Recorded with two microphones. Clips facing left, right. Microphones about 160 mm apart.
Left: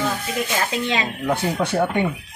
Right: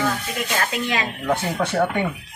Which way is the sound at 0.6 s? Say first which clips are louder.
Left 1 dB; 20° left (ahead or behind).